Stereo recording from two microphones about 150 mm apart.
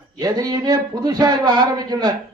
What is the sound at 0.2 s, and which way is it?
A man's voice, 25° right (ahead or behind).